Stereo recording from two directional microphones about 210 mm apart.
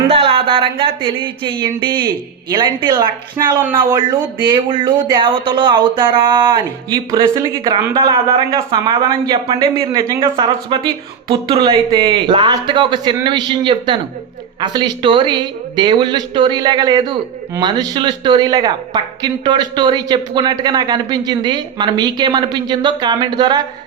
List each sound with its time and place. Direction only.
0.1 s speech: 25° right (ahead or behind)